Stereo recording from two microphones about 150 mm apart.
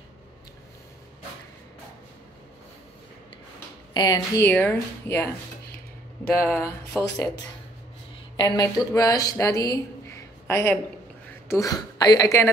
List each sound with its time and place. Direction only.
3.9 s speech: 25° left (ahead or behind)
6.4 s speech: 15° left (ahead or behind)
6.9 s speech: centre (ahead or behind)
8.4 s speech: 30° left (ahead or behind)